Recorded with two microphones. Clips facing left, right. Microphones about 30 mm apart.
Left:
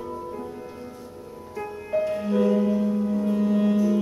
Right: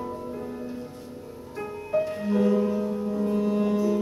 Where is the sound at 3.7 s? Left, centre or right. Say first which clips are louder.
Left 2 dB; centre.